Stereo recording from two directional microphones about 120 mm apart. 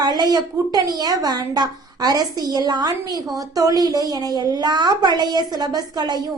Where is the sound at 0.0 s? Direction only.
35° right (ahead or behind).